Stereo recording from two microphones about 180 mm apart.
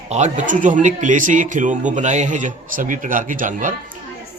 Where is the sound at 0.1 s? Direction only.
40° right (ahead or behind).